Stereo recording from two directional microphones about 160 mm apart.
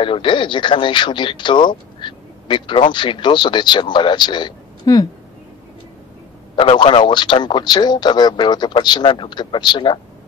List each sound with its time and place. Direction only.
0.0 s speech: 30° left (ahead or behind)
6.5 s speech: 30° left (ahead or behind)